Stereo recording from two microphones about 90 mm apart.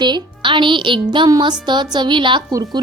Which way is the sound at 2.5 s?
40° right (ahead or behind).